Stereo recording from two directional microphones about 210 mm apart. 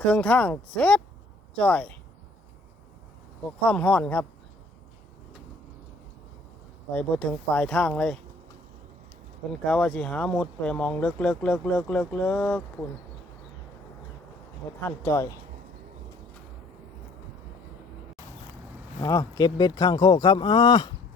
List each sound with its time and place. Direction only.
0.0 s speech: 5° left (ahead or behind)
3.6 s speech: 5° left (ahead or behind)
6.9 s speech: 5° left (ahead or behind)
9.5 s speech: 5° left (ahead or behind)
14.8 s speech: 10° left (ahead or behind)
19.0 s speech: 20° left (ahead or behind)